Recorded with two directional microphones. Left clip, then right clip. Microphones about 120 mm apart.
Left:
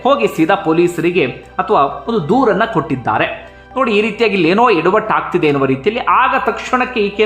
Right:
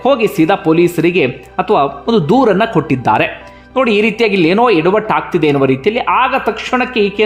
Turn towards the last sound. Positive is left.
turn(degrees=-20)  # may be behind; listen again after turning